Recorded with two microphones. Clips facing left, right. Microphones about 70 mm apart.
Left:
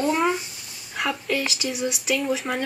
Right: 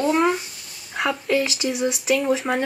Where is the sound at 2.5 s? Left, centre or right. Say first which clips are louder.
Right 4 dB; right.